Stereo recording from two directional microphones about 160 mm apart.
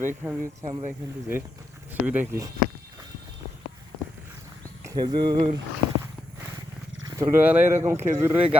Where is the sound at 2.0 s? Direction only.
10° right (ahead or behind).